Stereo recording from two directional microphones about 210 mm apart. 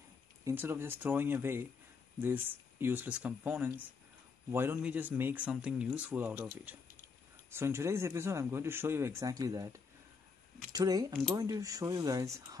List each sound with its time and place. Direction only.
0.5 s speech: 10° right (ahead or behind)